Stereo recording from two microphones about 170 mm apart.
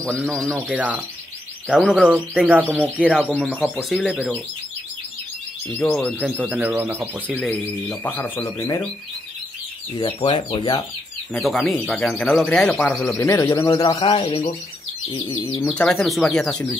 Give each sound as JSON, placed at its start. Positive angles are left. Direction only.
{"t": 0.0, "sound": "speech", "side_deg": 0}
{"t": 5.7, "sound": "speech", "side_deg": 10}
{"t": 5.9, "sound": "speech", "side_deg": -5}
{"t": 7.3, "sound": "speech", "side_deg": 0}
{"t": 9.9, "sound": "speech", "side_deg": 30}
{"t": 11.3, "sound": "speech", "side_deg": 0}
{"t": 13.1, "sound": "a man's voice", "side_deg": 20}
{"t": 13.9, "sound": "speech", "side_deg": 30}
{"t": 15.0, "sound": "a man's voice", "side_deg": 20}
{"t": 15.7, "sound": "speech", "side_deg": 5}